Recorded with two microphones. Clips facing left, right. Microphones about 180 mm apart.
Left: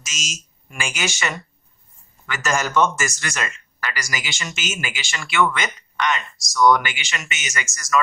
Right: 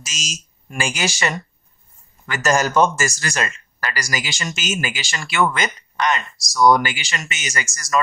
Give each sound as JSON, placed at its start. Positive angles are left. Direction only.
{"t": 0.0, "sound": "speech", "side_deg": -35}